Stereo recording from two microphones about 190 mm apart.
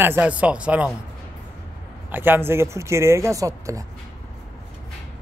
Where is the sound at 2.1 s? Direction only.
10° right (ahead or behind).